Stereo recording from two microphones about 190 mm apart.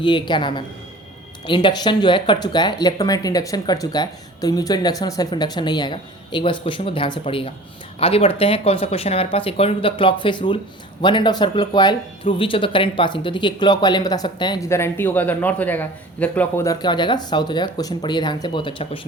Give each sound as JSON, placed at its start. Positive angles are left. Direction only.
{"t": 0.0, "sound": "speech", "side_deg": 25}